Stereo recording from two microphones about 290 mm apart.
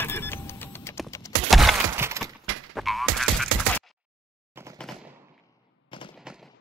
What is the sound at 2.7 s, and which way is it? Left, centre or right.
Frog, centre.